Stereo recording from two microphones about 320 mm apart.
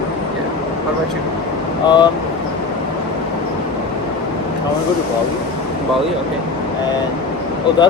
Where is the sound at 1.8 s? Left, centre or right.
Centre.